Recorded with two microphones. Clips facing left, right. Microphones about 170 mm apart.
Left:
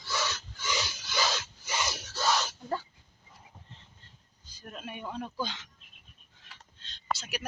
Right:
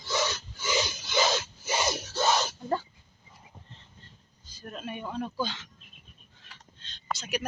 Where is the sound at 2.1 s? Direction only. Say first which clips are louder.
Right 2 dB; 25° right (ahead or behind).